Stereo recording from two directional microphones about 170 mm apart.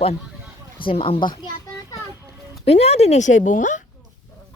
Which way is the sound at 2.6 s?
40° left (ahead or behind).